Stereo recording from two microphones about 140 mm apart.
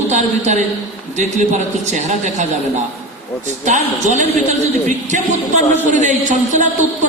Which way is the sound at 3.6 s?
60° right (ahead or behind).